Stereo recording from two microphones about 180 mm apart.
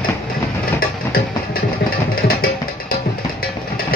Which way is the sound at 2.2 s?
55° left (ahead or behind).